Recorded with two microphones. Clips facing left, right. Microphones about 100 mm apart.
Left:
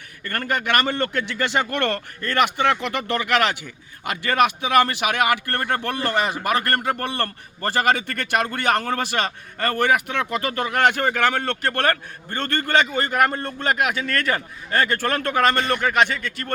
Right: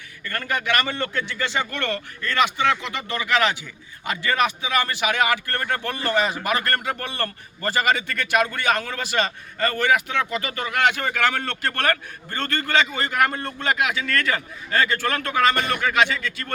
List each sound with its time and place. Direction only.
0.3 s a man's voice: 50° left (ahead or behind)
1.2 s a man's voice: 65° left (ahead or behind)
10.6 s a man's voice: 40° left (ahead or behind)